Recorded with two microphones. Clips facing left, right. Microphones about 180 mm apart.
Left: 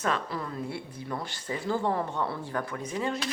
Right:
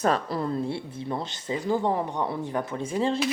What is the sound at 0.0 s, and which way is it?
Speech, 35° right (ahead or behind).